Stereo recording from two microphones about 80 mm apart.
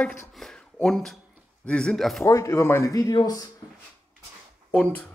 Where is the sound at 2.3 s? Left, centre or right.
Left.